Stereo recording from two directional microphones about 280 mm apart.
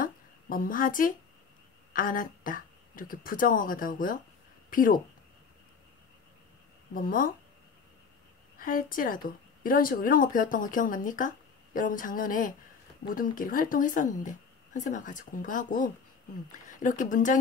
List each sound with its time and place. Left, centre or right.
0.0 s a sound: left
2.0 s a woman's voice: left
6.9 s a woman's voice: left
8.5 s a woman's voice: left